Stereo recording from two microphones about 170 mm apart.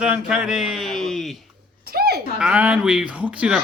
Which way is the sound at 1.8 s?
65° right (ahead or behind).